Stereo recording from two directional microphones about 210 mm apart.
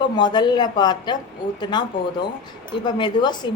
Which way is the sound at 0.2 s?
20° left (ahead or behind).